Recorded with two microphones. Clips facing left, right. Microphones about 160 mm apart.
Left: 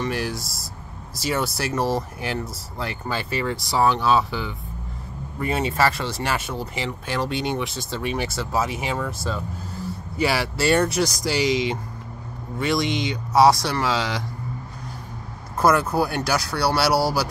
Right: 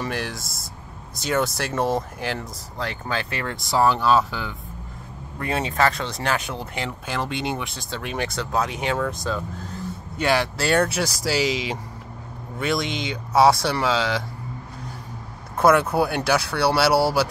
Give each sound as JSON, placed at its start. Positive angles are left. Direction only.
{"t": 0.0, "sound": "speech", "side_deg": 0}
{"t": 15.6, "sound": "speech", "side_deg": 0}
{"t": 16.9, "sound": "speech", "side_deg": -25}